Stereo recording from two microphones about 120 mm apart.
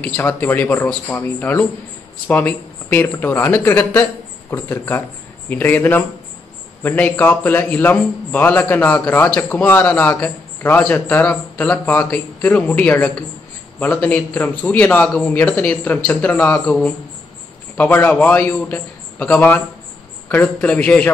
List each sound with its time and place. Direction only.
0.0 s a man's voice: 15° left (ahead or behind)
17.7 s a man's voice: 15° left (ahead or behind)